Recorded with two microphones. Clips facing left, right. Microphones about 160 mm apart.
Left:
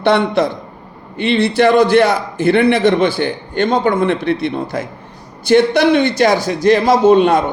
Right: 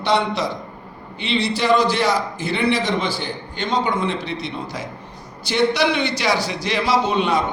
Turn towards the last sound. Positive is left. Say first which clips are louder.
# left 9 dB
turn(degrees=50)  # may be behind; listen again after turning